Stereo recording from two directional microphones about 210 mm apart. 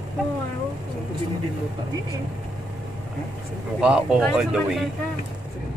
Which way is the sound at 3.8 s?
5° right (ahead or behind).